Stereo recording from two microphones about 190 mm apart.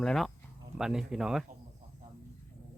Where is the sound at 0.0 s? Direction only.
Centre (ahead or behind).